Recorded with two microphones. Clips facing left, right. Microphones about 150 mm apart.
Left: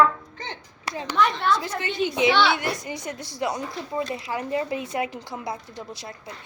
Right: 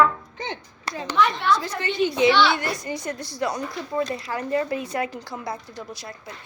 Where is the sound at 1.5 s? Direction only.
45° left (ahead or behind).